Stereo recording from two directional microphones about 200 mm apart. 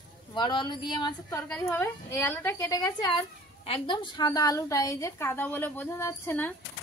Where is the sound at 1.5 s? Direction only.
10° left (ahead or behind).